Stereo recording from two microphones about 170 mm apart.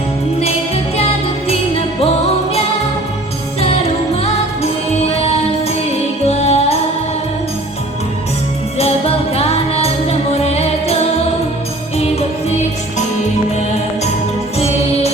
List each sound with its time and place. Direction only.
1.5 s music: 35° left (ahead or behind)
3.6 s music: 35° left (ahead or behind)
8.8 s music: 35° left (ahead or behind)